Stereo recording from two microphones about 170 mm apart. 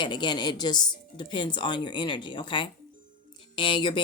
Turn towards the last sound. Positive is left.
turn(degrees=30)  # may be behind; listen again after turning